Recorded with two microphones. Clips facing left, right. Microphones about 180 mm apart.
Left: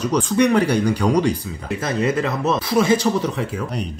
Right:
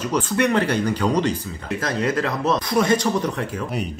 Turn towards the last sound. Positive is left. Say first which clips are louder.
# left 1 dB
turn(degrees=0)  # may be behind; listen again after turning